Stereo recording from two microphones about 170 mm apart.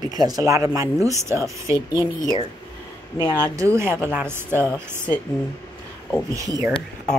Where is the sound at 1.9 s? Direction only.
25° left (ahead or behind).